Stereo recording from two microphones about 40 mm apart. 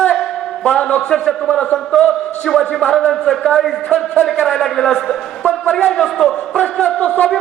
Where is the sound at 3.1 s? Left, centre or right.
Centre.